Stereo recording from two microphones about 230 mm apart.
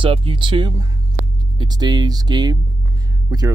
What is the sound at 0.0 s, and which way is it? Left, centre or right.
Speech, right.